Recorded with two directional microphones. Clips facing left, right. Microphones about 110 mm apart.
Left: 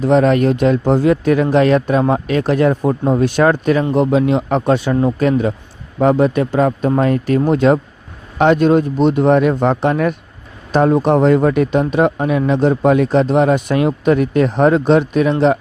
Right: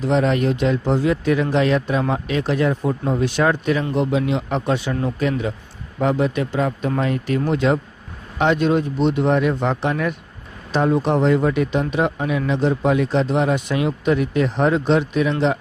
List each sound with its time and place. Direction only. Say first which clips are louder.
0.0 s speech: left 6 dB; 55° left (ahead or behind)